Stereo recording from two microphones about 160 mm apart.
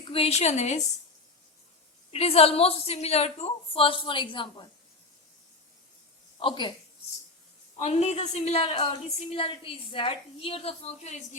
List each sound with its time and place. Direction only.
0.1 s a woman's voice: 40° left (ahead or behind)
2.0 s a woman's voice: 40° left (ahead or behind)
6.4 s a woman's voice: 30° left (ahead or behind)
7.8 s a woman's voice: 45° left (ahead or behind)